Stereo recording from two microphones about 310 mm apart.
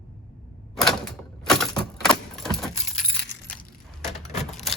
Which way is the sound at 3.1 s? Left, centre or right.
Left.